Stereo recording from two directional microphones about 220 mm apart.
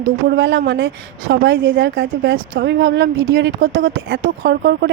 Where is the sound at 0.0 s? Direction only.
50° right (ahead or behind).